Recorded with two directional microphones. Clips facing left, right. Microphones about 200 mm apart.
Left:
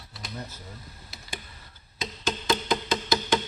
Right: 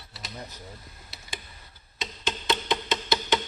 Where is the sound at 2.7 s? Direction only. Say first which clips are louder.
Left 1 dB; centre (ahead or behind).